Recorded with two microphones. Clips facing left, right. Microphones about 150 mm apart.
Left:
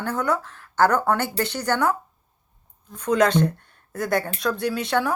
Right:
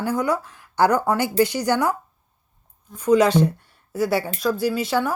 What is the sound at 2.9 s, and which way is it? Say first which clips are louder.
Speech: right 3 dB; 5° right (ahead or behind).